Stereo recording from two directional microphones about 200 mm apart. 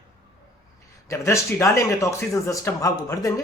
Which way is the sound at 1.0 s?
15° left (ahead or behind).